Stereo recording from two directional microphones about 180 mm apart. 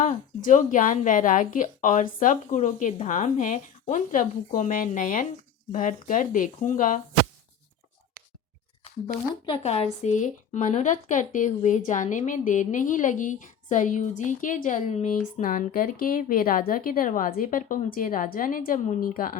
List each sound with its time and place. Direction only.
0.0 s a woman's voice: 45° left (ahead or behind)
9.5 s a woman's voice: 35° left (ahead or behind); by 19.4 s 50° left (ahead or behind)